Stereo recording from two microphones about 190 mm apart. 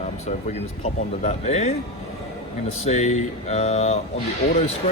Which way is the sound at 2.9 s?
35° left (ahead or behind).